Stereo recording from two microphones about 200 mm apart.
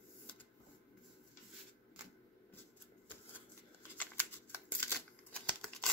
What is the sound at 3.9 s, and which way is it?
Scissors, 10° left (ahead or behind).